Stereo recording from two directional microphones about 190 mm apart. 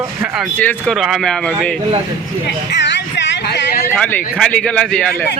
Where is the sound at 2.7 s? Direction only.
65° left (ahead or behind).